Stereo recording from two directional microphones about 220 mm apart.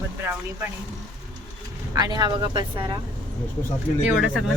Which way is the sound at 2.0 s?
20° right (ahead or behind).